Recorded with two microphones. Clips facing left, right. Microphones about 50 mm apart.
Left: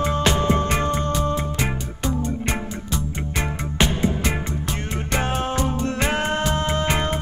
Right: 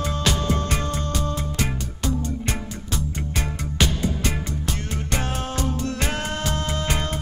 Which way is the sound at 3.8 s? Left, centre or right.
Left.